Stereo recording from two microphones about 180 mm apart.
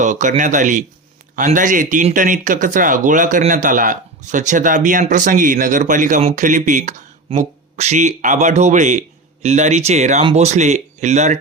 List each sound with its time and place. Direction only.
0.0 s speech: 45° right (ahead or behind)